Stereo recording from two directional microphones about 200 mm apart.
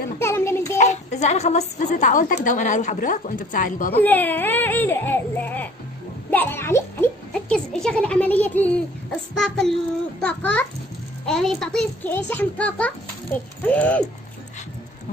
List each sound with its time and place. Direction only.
0.2 s a sound: 15° left (ahead or behind)
0.7 s a woman's voice: 35° left (ahead or behind)
4.0 s a child's voice: 10° left (ahead or behind)